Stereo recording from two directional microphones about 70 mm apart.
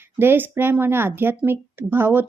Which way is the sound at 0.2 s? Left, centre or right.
Right.